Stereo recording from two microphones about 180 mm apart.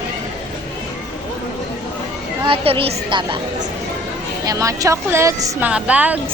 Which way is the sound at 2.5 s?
30° right (ahead or behind).